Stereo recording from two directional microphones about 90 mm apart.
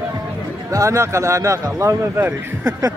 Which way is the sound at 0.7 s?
35° right (ahead or behind).